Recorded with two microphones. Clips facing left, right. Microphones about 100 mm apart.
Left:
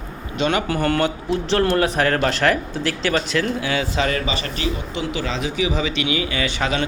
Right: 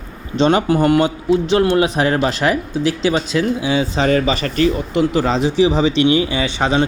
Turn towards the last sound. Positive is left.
turn(degrees=-25)  # may be behind; listen again after turning